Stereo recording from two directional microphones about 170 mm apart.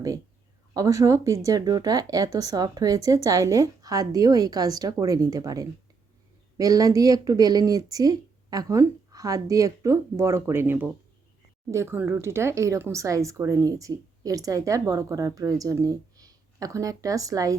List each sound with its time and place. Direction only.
0.7 s speech: 20° right (ahead or behind)